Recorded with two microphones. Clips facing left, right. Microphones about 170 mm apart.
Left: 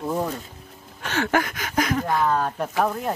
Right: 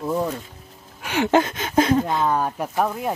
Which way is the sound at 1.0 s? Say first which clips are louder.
Right 4 dB; 15° right (ahead or behind).